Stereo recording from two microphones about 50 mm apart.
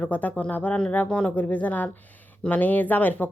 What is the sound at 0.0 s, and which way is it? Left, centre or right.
A woman's voice, left.